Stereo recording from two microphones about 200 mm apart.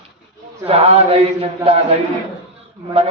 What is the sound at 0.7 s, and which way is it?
A man's voice, 30° right (ahead or behind).